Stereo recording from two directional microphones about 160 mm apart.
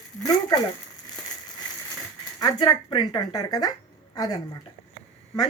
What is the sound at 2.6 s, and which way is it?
Speech, 30° left (ahead or behind).